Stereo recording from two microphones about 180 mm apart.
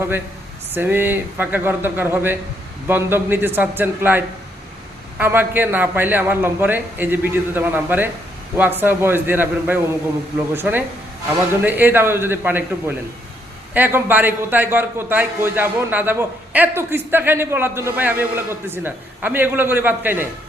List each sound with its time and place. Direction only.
0.7 s a man's voice: 10° right (ahead or behind)
13.7 s a man's voice: 10° right (ahead or behind)